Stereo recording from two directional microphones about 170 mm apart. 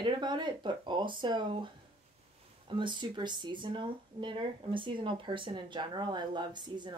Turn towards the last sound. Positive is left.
turn(degrees=-25)  # may be behind; listen again after turning